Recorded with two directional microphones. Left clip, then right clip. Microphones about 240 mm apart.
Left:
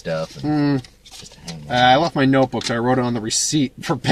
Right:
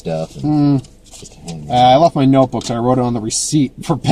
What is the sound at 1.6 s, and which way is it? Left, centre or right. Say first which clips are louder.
Speech: right 5 dB; left.